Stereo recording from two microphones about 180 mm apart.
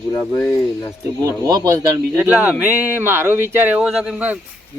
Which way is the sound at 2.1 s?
10° right (ahead or behind).